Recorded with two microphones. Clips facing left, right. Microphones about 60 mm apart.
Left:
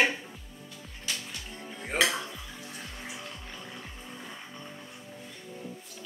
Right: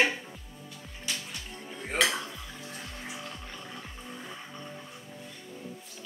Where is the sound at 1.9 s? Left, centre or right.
Centre.